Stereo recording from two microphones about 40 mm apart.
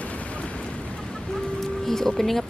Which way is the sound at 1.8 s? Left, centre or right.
Centre.